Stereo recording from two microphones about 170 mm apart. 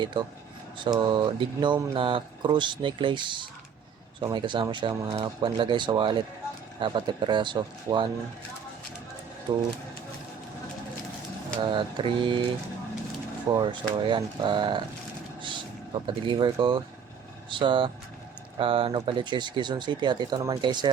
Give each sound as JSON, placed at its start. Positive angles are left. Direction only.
{"t": 0.0, "sound": "speech", "side_deg": -30}
{"t": 11.6, "sound": "speech", "side_deg": -30}
{"t": 13.5, "sound": "speech", "side_deg": -30}